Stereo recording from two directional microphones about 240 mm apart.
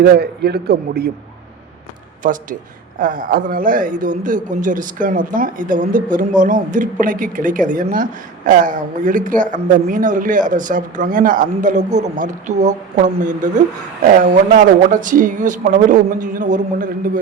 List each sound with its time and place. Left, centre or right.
0.0 s a man's voice: right
2.2 s a man's voice: right